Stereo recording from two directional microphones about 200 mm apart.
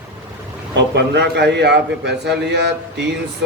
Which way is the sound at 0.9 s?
55° right (ahead or behind).